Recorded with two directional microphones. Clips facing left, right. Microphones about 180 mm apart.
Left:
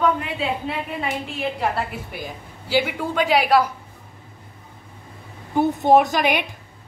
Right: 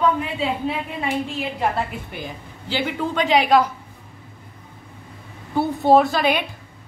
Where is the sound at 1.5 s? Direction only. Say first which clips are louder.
Right 1 dB; 5° left (ahead or behind).